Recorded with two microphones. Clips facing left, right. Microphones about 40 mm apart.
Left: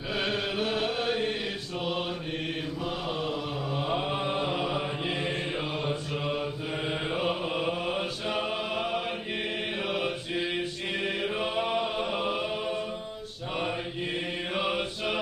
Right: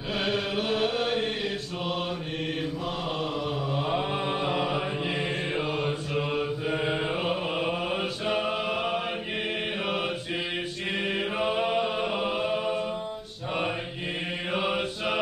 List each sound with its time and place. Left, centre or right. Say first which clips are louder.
0.3 s chant: right 3 dB; centre
3.8 s mantra: even; centre
8.7 s a sound: right 2 dB; centre
9.8 s mantra: even; centre
11.1 s chant: right 2 dB; centre
12.4 s music: right 3 dB; right
14.5 s mantra: right 2 dB; centre